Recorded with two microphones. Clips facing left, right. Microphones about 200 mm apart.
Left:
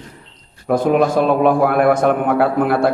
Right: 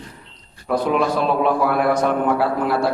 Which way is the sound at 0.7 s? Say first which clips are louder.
Left 4 dB; 50° left (ahead or behind).